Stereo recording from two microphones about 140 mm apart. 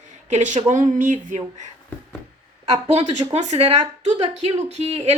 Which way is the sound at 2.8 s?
55° right (ahead or behind).